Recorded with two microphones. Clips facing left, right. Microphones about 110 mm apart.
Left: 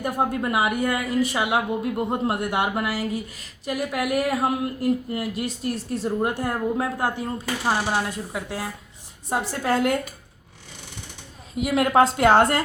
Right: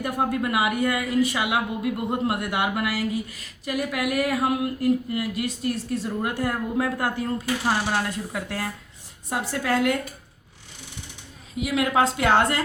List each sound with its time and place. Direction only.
0.0 s a woman's voice: 35° left (ahead or behind); by 8.7 s 15° left (ahead or behind)
9.3 s a woman's voice: 30° left (ahead or behind)
11.6 s a woman's voice: 45° left (ahead or behind)